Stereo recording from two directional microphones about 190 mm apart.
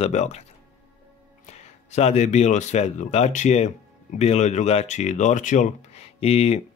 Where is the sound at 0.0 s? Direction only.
35° left (ahead or behind).